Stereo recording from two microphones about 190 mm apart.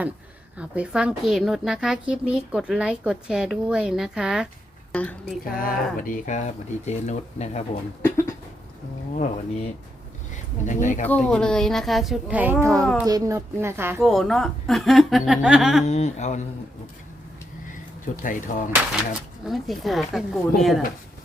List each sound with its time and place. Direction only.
0.6 s speech: 5° right (ahead or behind)
5.5 s speech: 50° left (ahead or behind)
8.0 s a sound: 15° left (ahead or behind)
9.1 s speech: 40° left (ahead or behind)
11.0 s speech: 5° left (ahead or behind); by 12.8 s 15° right (ahead or behind)
12.8 s speech: centre (ahead or behind)
13.1 s speech: 15° right (ahead or behind)
14.0 s speech: centre (ahead or behind)
15.9 s speech: 35° left (ahead or behind)
17.7 s a sound: 45° left (ahead or behind)
19.5 s speech: centre (ahead or behind)